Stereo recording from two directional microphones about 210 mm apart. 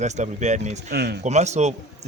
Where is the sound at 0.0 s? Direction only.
35° right (ahead or behind).